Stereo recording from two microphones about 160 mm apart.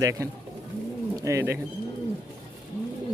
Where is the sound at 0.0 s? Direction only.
20° right (ahead or behind).